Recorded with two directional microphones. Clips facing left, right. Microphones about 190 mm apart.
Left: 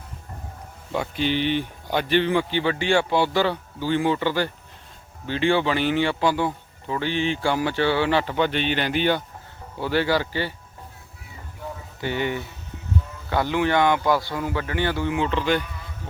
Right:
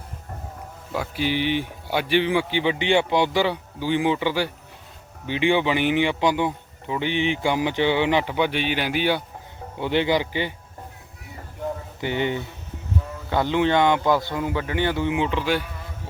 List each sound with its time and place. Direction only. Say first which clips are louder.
0.9 s speech: left 1 dB; 10° right (ahead or behind)
9.7 s speech: right 1 dB; 20° right (ahead or behind)
11.9 s a man's voice: even; 20° right (ahead or behind)